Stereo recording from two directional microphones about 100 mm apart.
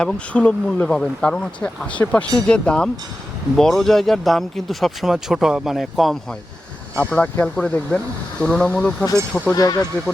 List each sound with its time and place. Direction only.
0.0 s speech: 15° left (ahead or behind)
7.0 s speech: 15° left (ahead or behind)
9.6 s speech: 40° left (ahead or behind)